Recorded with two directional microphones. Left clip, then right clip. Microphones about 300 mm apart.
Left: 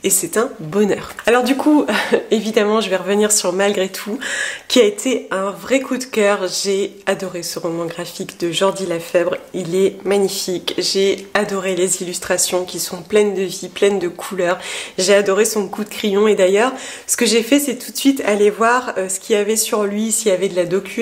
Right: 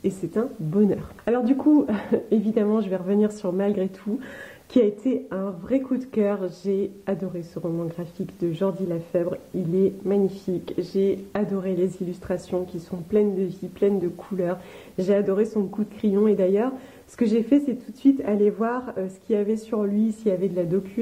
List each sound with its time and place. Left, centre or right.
0.0 s speech: centre